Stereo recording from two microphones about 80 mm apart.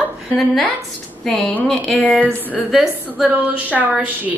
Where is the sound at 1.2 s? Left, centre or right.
Centre.